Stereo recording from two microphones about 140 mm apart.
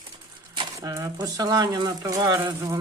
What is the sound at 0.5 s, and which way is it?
Speech, 25° right (ahead or behind).